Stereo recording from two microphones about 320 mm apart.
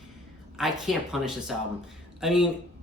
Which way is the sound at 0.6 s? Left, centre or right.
Centre.